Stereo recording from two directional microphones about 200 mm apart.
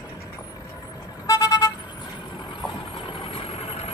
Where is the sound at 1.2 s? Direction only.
20° left (ahead or behind).